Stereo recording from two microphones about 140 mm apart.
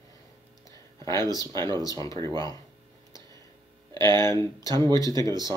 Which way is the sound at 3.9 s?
30° right (ahead or behind).